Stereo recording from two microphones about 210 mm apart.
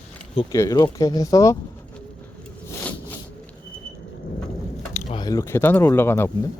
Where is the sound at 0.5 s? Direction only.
15° left (ahead or behind).